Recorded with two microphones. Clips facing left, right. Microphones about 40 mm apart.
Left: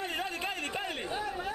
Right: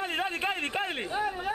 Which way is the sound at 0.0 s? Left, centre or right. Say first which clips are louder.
Right 4 dB; right.